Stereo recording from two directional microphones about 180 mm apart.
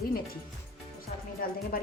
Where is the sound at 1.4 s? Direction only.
55° left (ahead or behind).